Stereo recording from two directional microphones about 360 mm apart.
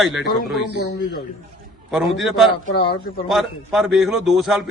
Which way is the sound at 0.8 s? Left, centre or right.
Left.